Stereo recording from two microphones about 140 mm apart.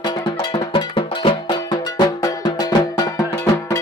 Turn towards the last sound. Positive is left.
turn(degrees=25)  # may be behind; listen again after turning